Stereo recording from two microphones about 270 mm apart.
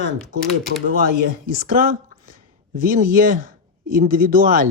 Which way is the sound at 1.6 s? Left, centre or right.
Right.